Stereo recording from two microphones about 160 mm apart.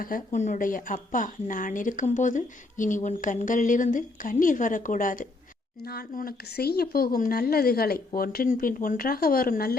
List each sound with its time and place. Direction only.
0.0 s speech: 55° left (ahead or behind)
5.8 s speech: 70° left (ahead or behind)